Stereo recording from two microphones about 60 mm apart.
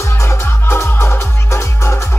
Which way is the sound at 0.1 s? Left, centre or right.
Left.